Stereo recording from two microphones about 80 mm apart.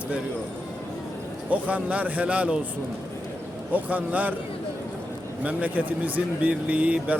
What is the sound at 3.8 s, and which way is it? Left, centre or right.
Speech, centre.